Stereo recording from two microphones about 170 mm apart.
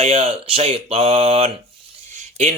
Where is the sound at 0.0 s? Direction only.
35° right (ahead or behind).